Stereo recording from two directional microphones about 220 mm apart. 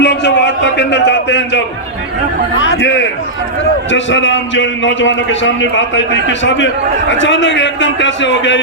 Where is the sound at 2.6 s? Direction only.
55° left (ahead or behind).